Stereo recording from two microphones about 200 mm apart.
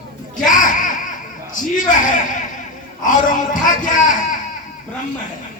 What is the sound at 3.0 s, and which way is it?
Speech, 40° left (ahead or behind).